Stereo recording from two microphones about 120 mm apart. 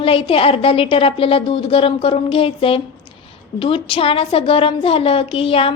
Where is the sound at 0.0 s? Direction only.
50° left (ahead or behind).